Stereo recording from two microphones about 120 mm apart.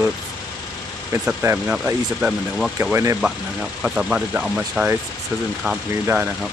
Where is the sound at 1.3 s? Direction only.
15° right (ahead or behind).